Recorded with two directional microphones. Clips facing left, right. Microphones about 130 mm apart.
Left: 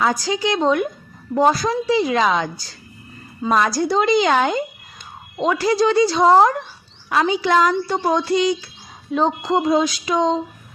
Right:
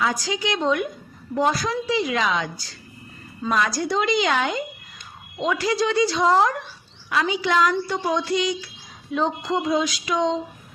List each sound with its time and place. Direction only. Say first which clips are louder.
0.0 s a woman's voice: left 4 dB; 35° left (ahead or behind)
3.5 s a woman's voice: left 5 dB; 35° left (ahead or behind)